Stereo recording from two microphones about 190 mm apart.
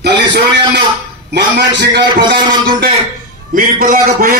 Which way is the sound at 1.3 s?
60° right (ahead or behind).